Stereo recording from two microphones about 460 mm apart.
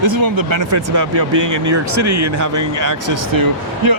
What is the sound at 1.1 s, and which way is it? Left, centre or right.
Speech, right.